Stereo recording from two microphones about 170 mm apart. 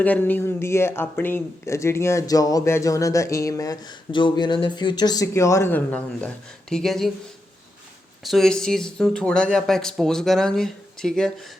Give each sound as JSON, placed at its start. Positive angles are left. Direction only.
{"t": 0.0, "sound": "speech", "side_deg": 10}
{"t": 8.2, "sound": "speech", "side_deg": 0}